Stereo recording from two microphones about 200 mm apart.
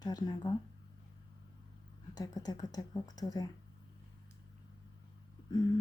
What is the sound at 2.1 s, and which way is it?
Speech, 20° left (ahead or behind).